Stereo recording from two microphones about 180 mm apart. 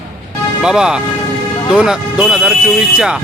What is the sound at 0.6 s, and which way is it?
Speech, 5° right (ahead or behind).